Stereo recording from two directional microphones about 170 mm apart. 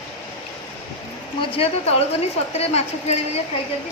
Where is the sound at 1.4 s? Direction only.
35° left (ahead or behind).